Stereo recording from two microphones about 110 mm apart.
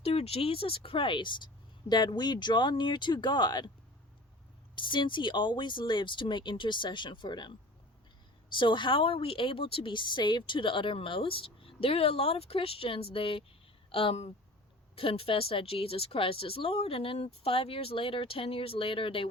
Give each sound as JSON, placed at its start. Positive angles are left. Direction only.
{"t": 0.0, "sound": "speech", "side_deg": 65}
{"t": 4.7, "sound": "speech", "side_deg": 45}
{"t": 8.5, "sound": "speech", "side_deg": 45}